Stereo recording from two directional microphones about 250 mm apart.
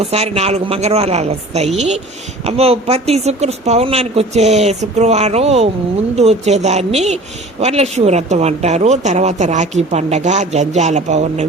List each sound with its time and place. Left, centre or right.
0.0 s speech: right